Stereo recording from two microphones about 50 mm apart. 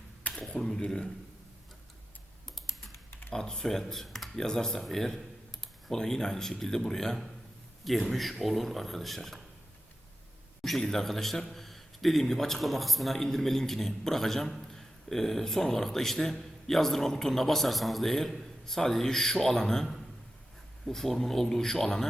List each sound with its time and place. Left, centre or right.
0.3 s speech: centre
3.1 s computer keyboard: left
3.3 s a man's voice: centre
10.6 s a man's voice: centre